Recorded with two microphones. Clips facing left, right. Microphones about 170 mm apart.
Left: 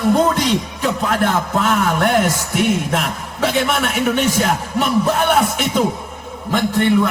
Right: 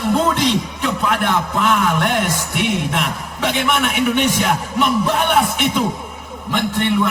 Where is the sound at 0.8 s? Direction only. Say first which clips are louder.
Left 1 dB; 40° left (ahead or behind).